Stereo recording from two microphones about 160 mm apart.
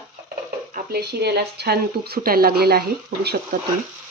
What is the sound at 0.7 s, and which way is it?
Speech, 85° right.